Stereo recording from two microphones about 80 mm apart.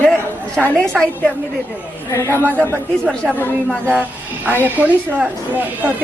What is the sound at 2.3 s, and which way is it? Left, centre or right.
Speech, right.